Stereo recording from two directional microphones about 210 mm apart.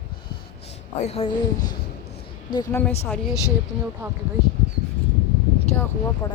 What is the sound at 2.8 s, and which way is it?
Speech, 10° left (ahead or behind).